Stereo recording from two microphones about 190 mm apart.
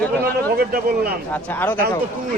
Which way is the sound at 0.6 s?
50° right (ahead or behind).